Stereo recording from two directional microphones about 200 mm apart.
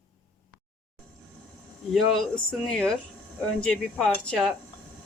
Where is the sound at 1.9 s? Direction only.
Centre (ahead or behind).